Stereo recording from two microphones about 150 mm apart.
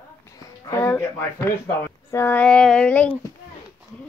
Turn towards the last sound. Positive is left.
turn(degrees=10)  # may be behind; listen again after turning